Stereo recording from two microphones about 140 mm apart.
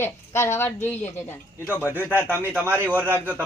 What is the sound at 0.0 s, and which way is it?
Speech, 20° left (ahead or behind).